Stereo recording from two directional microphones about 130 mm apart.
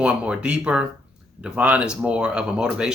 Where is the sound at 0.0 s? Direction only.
10° right (ahead or behind).